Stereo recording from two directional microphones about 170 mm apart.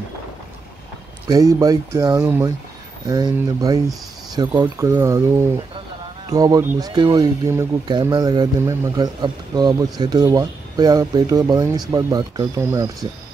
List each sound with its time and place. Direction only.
1.3 s speech: 20° right (ahead or behind)